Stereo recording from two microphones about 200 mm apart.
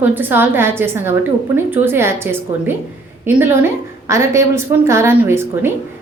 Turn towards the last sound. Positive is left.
turn(degrees=-10)  # may be behind; listen again after turning